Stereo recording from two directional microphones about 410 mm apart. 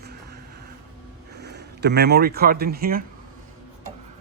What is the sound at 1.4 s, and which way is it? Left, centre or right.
Speech, right.